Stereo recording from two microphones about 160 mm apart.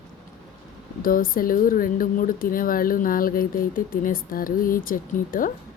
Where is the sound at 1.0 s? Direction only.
65° left (ahead or behind).